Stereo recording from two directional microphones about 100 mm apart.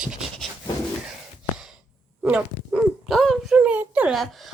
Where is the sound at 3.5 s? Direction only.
15° right (ahead or behind).